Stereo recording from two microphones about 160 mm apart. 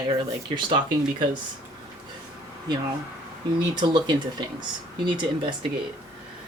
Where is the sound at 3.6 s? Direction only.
25° right (ahead or behind).